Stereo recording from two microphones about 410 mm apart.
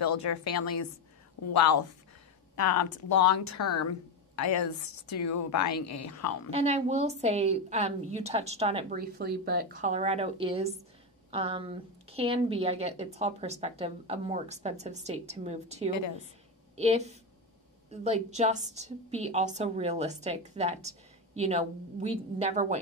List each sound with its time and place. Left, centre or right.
0.2 s a woman's voice: left
5.2 s a woman's voice: left
6.5 s a woman's voice: centre